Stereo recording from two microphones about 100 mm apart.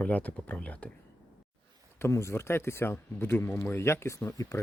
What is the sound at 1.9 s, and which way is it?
Speech, 25° left (ahead or behind).